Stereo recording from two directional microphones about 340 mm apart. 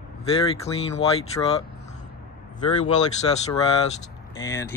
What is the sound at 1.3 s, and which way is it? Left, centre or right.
Speech, centre.